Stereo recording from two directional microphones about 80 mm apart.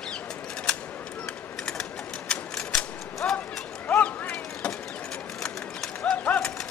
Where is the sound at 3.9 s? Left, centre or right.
Centre.